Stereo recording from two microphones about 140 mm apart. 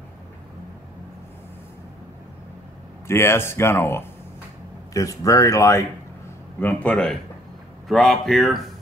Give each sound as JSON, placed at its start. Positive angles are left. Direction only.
{"t": 3.1, "sound": "speech", "side_deg": 20}